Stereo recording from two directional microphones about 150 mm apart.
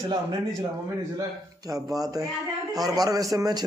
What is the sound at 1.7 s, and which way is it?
A man's voice, 25° right (ahead or behind).